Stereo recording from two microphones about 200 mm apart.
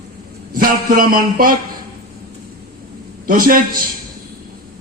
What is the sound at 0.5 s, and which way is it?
A man's voice, 45° right (ahead or behind).